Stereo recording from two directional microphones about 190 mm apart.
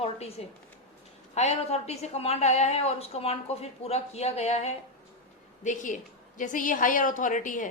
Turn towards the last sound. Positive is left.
turn(degrees=45)  # may be behind; listen again after turning